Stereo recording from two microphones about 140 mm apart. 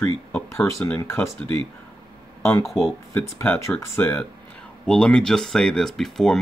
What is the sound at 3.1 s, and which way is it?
Speech, 15° left (ahead or behind).